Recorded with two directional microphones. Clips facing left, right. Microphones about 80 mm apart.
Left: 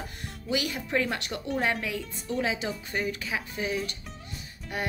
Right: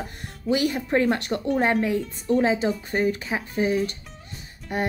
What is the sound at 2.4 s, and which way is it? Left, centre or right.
Speech, right.